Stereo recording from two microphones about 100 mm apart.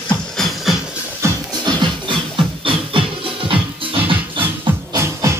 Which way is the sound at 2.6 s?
60° right (ahead or behind).